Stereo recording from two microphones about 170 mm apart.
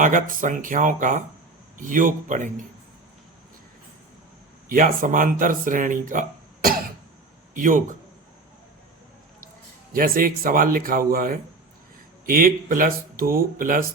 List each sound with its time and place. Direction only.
0.0 s speech: 50° right (ahead or behind)
4.7 s speech: 55° right (ahead or behind)
9.9 s speech: 55° right (ahead or behind)